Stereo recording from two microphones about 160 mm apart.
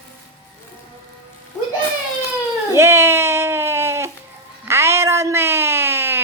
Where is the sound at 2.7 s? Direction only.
15° right (ahead or behind).